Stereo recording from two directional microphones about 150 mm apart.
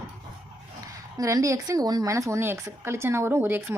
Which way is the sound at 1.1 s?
20° right (ahead or behind).